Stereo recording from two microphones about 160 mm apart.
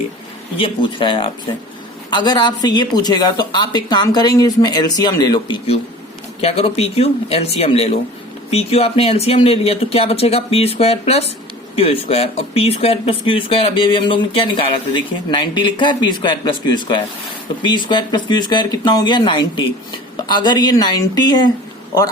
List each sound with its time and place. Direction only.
0.5 s speech: 30° left (ahead or behind)
6.4 s speech: 40° left (ahead or behind); by 21.5 s 25° left (ahead or behind)